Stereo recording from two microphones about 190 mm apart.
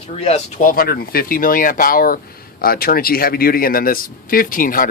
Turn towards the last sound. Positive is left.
turn(degrees=45)  # may be behind; listen again after turning